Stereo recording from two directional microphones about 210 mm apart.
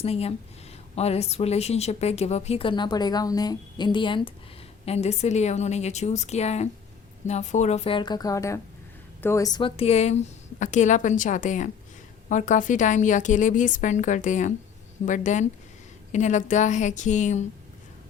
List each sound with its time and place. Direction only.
0.0 s a woman's voice: 30° left (ahead or behind)